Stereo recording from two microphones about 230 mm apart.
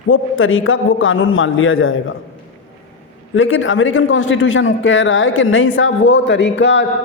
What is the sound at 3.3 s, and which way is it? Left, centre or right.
A man's voice, left.